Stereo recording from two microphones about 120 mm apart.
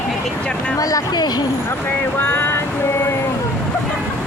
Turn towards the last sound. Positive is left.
turn(degrees=20)  # may be behind; listen again after turning